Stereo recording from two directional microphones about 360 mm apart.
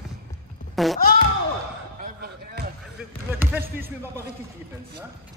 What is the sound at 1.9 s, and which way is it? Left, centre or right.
Basketball bounce, right.